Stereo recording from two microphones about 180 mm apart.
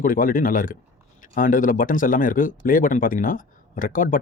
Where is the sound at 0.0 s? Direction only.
50° left (ahead or behind).